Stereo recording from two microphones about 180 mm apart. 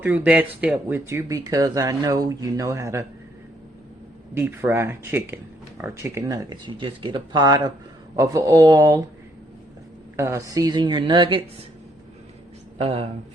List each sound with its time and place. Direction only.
0.0 s speech: 10° right (ahead or behind)
4.4 s a woman's voice: 15° right (ahead or behind)
10.2 s a woman's voice: 15° right (ahead or behind)
12.8 s speech: 35° right (ahead or behind)